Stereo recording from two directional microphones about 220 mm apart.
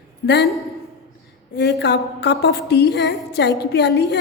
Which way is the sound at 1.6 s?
50° left (ahead or behind).